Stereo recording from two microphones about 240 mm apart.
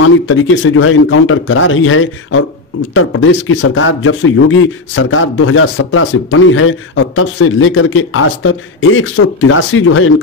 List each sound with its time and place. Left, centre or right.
0.0 s speech: left